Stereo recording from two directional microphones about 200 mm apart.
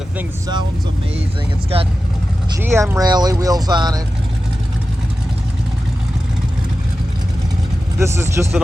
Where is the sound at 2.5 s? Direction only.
10° right (ahead or behind).